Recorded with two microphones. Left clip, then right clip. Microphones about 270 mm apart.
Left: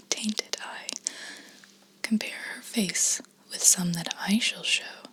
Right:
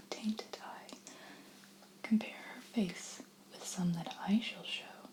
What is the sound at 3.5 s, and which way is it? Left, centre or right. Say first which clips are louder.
Speech: left 17 dB; left.